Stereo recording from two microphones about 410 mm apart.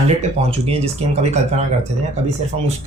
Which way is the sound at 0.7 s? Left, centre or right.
Centre.